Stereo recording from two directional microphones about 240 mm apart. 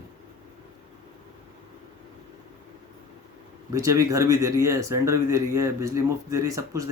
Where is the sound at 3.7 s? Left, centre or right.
Centre.